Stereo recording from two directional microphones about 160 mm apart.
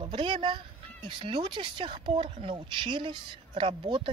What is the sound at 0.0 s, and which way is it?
Speech, 30° right (ahead or behind).